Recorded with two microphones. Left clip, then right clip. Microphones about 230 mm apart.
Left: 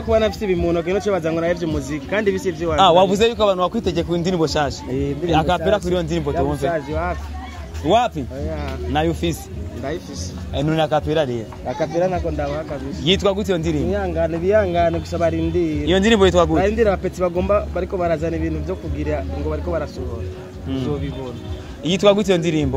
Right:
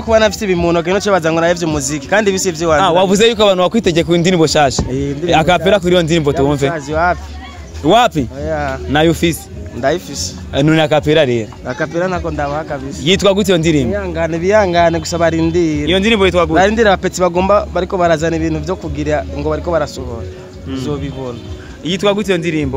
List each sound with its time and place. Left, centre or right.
0.1 s speech: right
15.9 s speech: centre
16.5 s speech: right
21.8 s speech: centre